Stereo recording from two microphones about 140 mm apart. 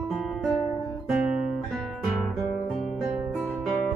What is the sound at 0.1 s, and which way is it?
Music, 5° right (ahead or behind).